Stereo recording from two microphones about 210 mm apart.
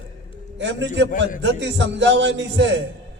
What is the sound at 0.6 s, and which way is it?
A man's voice, 60° right (ahead or behind).